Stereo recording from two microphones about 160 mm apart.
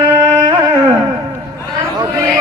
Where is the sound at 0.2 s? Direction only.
20° right (ahead or behind).